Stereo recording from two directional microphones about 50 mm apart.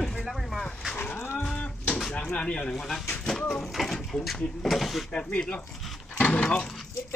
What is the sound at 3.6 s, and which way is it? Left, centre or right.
Speech, centre.